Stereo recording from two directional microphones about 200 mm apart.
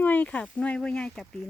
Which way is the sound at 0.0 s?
10° left (ahead or behind).